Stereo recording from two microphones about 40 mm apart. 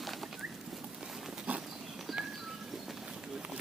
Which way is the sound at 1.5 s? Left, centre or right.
Right.